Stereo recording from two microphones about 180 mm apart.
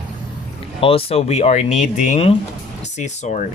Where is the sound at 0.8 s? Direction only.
30° left (ahead or behind).